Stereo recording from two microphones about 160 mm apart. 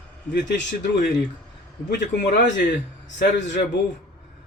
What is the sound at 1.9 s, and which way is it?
Speech, 90° left.